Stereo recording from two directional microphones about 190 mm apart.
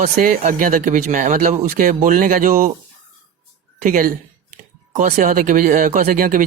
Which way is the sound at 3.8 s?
45° right (ahead or behind).